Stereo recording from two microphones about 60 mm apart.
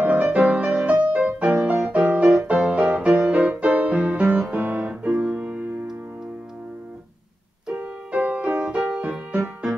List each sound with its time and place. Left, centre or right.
0.0 s music: right
7.7 s music: right